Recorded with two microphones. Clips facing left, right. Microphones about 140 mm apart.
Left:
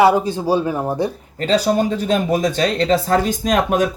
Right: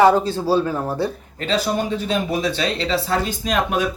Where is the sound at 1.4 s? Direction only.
40° left (ahead or behind).